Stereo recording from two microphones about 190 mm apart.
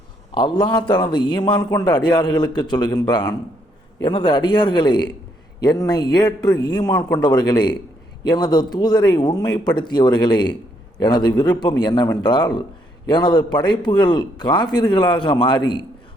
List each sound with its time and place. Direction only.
0.3 s a man's voice: 25° left (ahead or behind)